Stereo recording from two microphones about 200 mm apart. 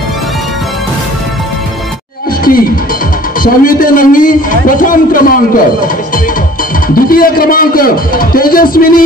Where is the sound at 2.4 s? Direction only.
45° left (ahead or behind).